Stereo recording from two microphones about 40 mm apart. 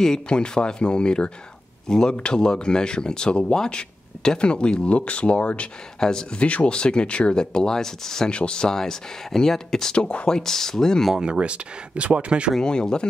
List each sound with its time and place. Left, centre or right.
0.0 s speech: centre; by 5.7 s left
5.9 s speech: centre
6.4 s speech: left; by 8.3 s centre
8.3 s speech: left
9.9 s speech: left
11.2 s speech: right
12.5 s speech: centre